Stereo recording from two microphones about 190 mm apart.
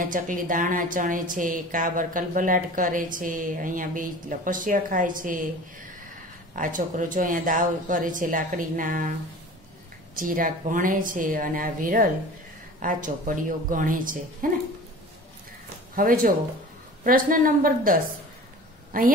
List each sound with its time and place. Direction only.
0.0 s a woman's voice: 45° right (ahead or behind)
6.5 s a woman's voice: 45° right (ahead or behind)
10.1 s a woman's voice: 45° right (ahead or behind)
16.0 s a woman's voice: 45° right (ahead or behind)